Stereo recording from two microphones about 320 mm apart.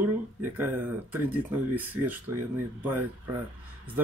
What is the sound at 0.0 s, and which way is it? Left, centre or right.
Speech, centre.